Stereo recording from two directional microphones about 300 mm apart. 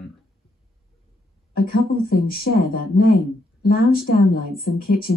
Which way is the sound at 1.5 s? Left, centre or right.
Left.